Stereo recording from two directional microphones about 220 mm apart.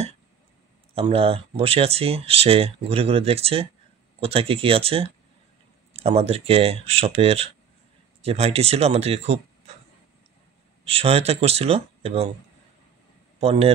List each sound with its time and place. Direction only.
0.9 s speech: 25° right (ahead or behind)
10.9 s speech: 25° right (ahead or behind)
13.4 s speech: 25° right (ahead or behind)